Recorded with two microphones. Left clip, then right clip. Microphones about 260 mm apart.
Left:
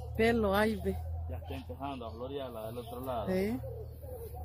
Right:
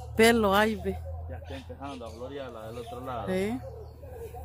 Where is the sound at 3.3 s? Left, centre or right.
Centre.